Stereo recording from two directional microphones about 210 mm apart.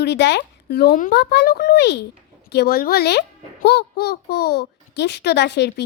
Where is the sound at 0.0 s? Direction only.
55° left (ahead or behind).